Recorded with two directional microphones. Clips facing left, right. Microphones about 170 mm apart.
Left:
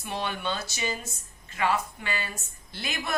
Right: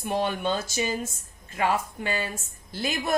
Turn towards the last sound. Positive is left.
turn(degrees=-40)  # may be behind; listen again after turning